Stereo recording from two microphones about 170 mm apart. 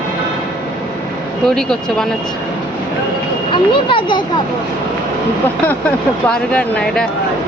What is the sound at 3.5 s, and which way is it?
Speech, 30° left (ahead or behind).